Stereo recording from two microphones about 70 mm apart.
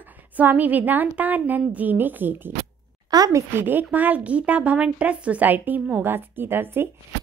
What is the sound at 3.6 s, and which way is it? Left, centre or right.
A woman's voice, right.